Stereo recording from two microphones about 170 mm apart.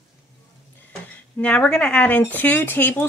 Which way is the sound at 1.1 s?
5° left (ahead or behind).